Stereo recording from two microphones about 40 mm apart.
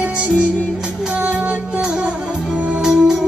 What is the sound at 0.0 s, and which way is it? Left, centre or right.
Music, right.